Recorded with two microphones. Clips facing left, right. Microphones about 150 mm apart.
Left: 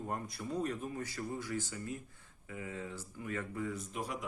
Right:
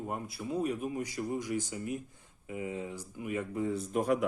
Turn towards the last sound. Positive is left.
turn(degrees=-55)  # may be behind; listen again after turning